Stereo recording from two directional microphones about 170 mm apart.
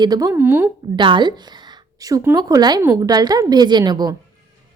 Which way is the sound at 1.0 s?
25° right (ahead or behind).